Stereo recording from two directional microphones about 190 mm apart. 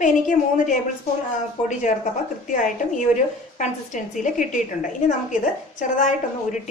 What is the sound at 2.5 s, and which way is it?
Speech, 40° left (ahead or behind).